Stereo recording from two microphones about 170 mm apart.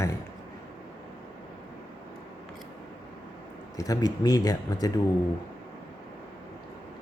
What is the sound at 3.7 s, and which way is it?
Speech, 20° left (ahead or behind).